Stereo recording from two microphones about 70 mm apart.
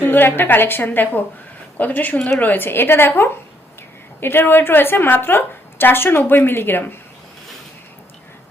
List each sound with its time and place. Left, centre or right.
0.0 s a woman's voice: left
4.2 s a woman's voice: left